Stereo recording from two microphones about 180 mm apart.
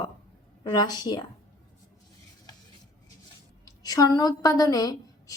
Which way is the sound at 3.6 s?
20° left (ahead or behind).